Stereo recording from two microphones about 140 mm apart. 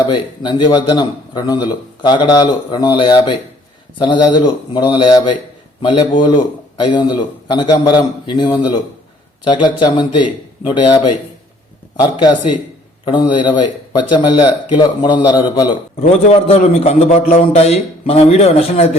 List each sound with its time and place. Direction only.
0.1 s a man's voice: 35° left (ahead or behind)
13.1 s a man's voice: 35° left (ahead or behind)
16.0 s a man's voice: 45° left (ahead or behind)